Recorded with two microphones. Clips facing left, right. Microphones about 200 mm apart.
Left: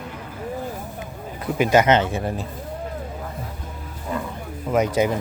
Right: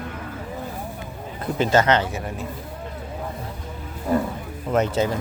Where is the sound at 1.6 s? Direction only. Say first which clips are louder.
Left 2 dB; 15° left (ahead or behind).